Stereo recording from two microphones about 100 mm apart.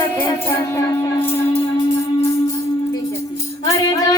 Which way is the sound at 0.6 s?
30° left (ahead or behind).